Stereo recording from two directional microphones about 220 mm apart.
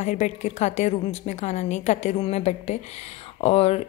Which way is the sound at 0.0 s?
35° left (ahead or behind).